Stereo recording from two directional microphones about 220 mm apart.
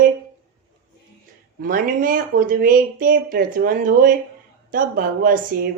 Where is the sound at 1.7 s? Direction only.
40° right (ahead or behind).